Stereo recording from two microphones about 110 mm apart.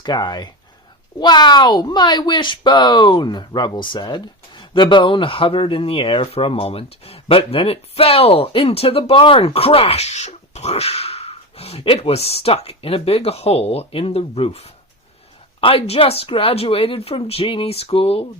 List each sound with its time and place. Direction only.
0.0 s speech: 40° left (ahead or behind); by 18.3 s 60° left (ahead or behind)